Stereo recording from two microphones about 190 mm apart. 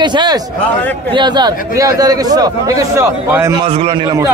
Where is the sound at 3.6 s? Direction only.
30° right (ahead or behind).